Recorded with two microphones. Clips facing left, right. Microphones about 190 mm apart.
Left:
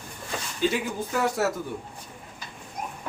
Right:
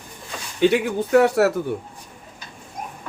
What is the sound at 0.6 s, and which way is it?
Speech, 65° right (ahead or behind).